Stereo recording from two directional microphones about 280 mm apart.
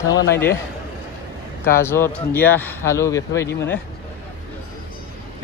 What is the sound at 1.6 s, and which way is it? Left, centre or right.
Speech, centre.